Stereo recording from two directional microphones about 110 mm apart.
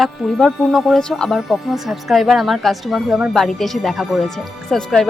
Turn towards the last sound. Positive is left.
turn(degrees=5)  # may be behind; listen again after turning